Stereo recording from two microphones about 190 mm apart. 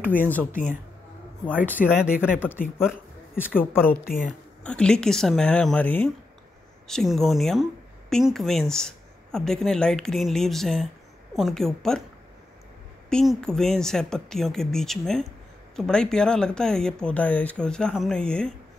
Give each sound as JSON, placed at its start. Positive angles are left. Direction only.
{"t": 1.7, "sound": "speech", "side_deg": -10}
{"t": 2.3, "sound": "a woman's voice", "side_deg": 10}
{"t": 4.0, "sound": "speech", "side_deg": 50}
{"t": 4.3, "sound": "speech", "side_deg": 5}
{"t": 13.1, "sound": "speech", "side_deg": 0}